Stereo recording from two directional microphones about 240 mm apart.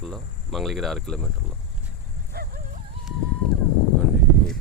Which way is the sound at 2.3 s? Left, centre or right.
Right.